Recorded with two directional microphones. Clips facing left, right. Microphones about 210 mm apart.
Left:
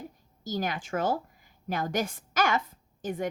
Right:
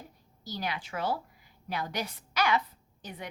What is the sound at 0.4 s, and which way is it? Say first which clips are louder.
A woman's voice: left 5 dB; 45° left (ahead or behind).